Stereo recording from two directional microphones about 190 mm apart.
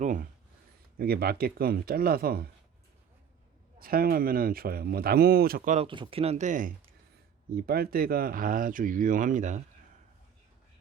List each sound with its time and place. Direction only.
0.0 s speech: 45° right (ahead or behind)
0.9 s speech: 55° right (ahead or behind)
3.8 s speech: 50° right (ahead or behind)
7.5 s speech: 55° right (ahead or behind)